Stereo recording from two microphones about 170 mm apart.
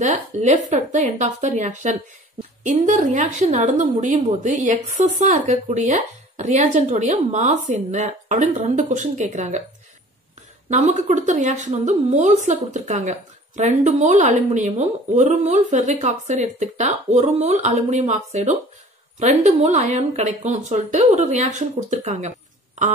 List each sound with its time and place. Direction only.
0.0 s speech: 45° right (ahead or behind)
10.7 s speech: 45° right (ahead or behind)